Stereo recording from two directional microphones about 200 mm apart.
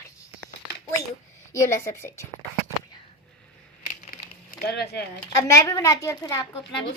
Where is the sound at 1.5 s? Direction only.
15° left (ahead or behind).